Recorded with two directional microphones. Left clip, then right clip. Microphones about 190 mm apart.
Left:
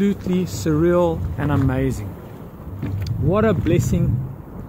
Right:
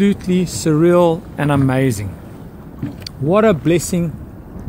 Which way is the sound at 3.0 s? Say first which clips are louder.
Right 6 dB; 40° right (ahead or behind).